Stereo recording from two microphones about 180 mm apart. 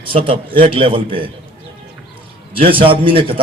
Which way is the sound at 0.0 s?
30° right (ahead or behind).